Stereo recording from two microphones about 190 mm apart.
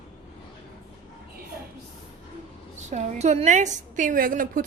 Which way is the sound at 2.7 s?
40° right (ahead or behind).